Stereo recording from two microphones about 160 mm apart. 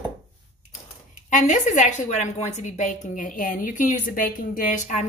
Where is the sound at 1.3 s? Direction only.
50° left (ahead or behind).